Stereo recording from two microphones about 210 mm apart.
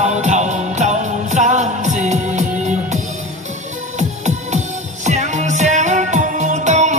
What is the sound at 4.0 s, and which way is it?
Music, 35° right (ahead or behind).